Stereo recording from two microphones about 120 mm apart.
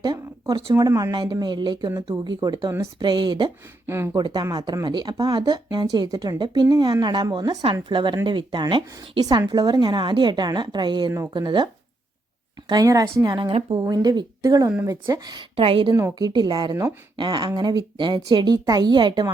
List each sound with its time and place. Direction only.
0.8 s a woman's voice: 30° right (ahead or behind)
3.8 s a woman's voice: 20° right (ahead or behind)
4.1 s a woman's voice: 35° right (ahead or behind)
12.8 s a woman's voice: 25° right (ahead or behind)
13.3 s a woman's voice: 40° right (ahead or behind)
15.5 s a woman's voice: 50° right (ahead or behind)
15.9 s a woman's voice: 30° right (ahead or behind)